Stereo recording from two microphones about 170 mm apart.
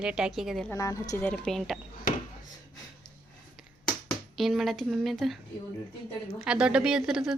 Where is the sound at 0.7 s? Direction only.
20° left (ahead or behind).